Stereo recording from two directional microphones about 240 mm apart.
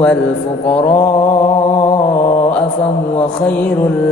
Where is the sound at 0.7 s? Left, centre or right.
Centre.